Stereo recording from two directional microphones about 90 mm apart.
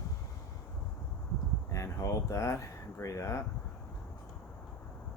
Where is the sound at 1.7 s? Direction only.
35° left (ahead or behind).